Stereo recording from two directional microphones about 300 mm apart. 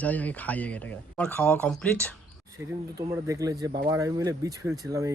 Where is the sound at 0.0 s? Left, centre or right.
Centre.